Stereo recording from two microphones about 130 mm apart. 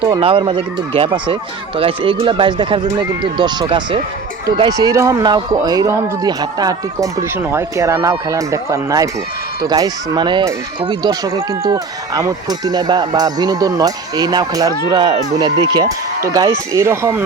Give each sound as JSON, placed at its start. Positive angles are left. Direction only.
{"t": 0.2, "sound": "speech", "side_deg": -45}
{"t": 4.9, "sound": "speech", "side_deg": -25}